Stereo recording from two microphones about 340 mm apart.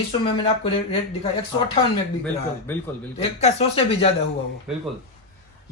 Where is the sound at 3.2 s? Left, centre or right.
Centre.